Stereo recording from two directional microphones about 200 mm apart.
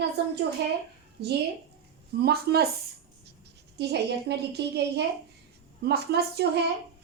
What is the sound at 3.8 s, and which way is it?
A woman's voice, 55° right (ahead or behind).